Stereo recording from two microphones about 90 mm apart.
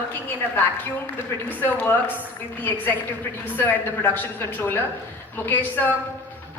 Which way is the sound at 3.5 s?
20° left (ahead or behind).